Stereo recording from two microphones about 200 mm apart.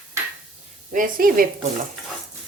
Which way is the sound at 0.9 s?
45° right (ahead or behind).